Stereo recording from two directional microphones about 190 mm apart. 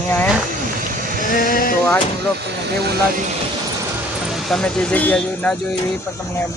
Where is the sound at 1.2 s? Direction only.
45° left (ahead or behind).